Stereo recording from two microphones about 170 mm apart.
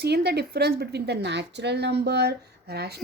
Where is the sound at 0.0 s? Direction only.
75° right (ahead or behind).